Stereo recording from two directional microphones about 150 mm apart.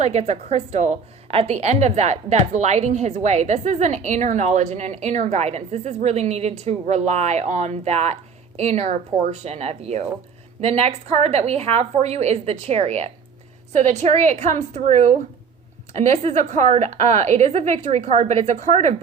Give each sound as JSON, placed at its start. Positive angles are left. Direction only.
{"t": 0.0, "sound": "a woman's voice", "side_deg": -50}